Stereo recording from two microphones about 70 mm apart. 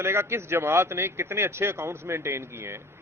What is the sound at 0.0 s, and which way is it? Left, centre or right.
A man's voice, right.